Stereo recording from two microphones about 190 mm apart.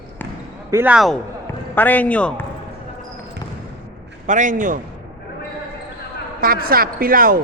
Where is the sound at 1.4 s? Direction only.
10° left (ahead or behind).